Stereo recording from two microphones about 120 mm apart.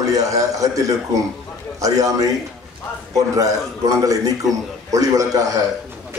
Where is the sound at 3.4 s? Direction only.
30° right (ahead or behind).